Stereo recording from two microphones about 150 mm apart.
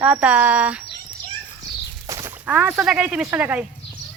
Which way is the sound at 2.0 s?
20° right (ahead or behind).